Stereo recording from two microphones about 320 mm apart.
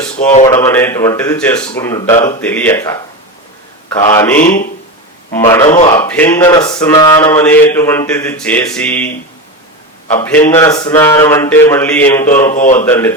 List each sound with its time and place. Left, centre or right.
0.4 s mantra: centre
4.1 s mantra: centre
5.6 s speech: left
6.0 s mantra: centre
10.1 s mantra: centre